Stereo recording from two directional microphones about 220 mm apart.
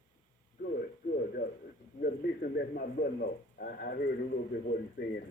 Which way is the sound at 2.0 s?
45° left (ahead or behind).